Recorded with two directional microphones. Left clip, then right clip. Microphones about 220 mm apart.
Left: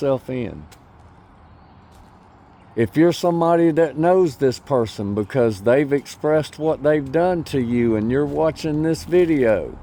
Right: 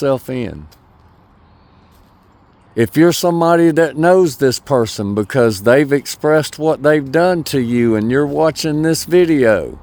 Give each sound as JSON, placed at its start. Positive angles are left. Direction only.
{"t": 0.0, "sound": "speech", "side_deg": -35}
{"t": 2.7, "sound": "speech", "side_deg": -35}